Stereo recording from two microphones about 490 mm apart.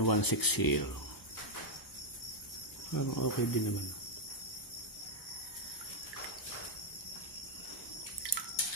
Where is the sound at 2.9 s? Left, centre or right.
Left.